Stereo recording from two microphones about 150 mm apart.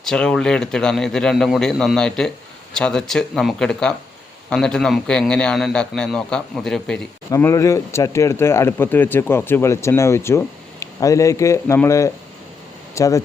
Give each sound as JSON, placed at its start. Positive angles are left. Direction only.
{"t": 0.0, "sound": "a man's voice", "side_deg": 5}
{"t": 7.3, "sound": "speech", "side_deg": 20}